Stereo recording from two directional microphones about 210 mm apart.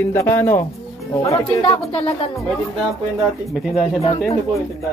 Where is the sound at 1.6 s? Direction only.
25° left (ahead or behind).